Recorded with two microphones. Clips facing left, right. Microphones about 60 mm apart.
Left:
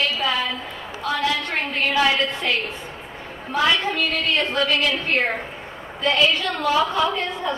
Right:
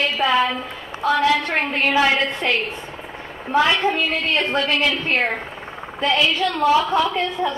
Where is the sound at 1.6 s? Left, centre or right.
Right.